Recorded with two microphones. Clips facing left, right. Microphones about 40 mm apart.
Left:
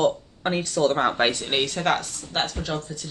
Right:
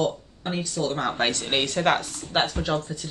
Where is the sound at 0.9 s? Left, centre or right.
Left.